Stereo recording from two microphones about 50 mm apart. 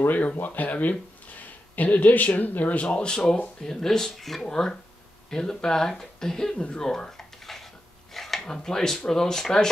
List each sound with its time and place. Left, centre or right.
0.1 s speech: left
3.6 s speech: centre
6.9 s a sound: centre